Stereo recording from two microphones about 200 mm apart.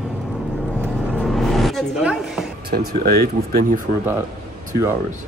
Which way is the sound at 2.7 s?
45° right (ahead or behind).